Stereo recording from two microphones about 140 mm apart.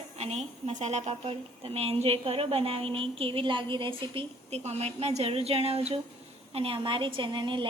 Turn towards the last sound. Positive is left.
turn(degrees=-35)  # may be behind; listen again after turning